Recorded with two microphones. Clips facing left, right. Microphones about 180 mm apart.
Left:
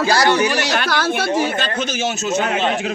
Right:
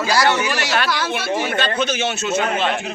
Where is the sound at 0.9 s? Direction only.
50° left (ahead or behind).